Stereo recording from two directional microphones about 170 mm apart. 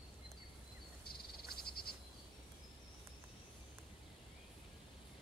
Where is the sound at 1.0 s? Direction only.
65° left (ahead or behind).